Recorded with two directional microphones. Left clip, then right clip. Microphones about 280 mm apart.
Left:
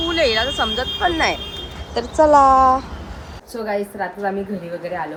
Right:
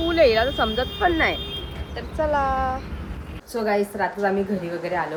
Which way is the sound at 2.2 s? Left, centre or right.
Left.